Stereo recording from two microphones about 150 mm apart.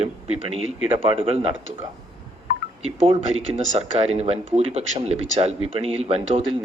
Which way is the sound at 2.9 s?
45° right (ahead or behind).